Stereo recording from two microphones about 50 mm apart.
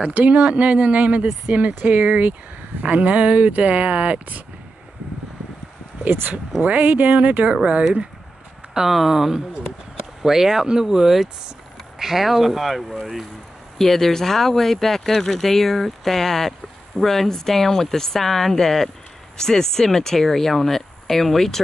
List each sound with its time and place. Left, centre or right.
0.0 s speech: right
1.8 s speech: right
6.0 s speech: right
6.6 s speech: right
7.5 s speech: centre
8.7 s speech: centre